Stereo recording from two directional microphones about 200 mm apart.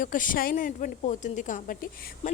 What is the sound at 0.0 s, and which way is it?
Speech, 40° left (ahead or behind).